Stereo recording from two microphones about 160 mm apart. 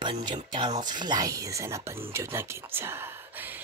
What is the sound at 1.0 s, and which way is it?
Speech, 25° right (ahead or behind).